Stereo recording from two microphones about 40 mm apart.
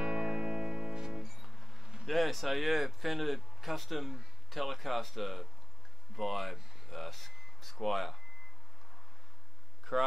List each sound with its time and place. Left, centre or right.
0.0 s music: centre
1.2 s music: centre
2.0 s speech: centre
9.9 s a sound: centre